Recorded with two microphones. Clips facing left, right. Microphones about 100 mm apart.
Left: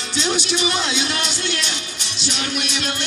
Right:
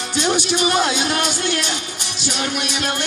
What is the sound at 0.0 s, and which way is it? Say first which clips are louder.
Speech: right 3 dB; 45° right (ahead or behind).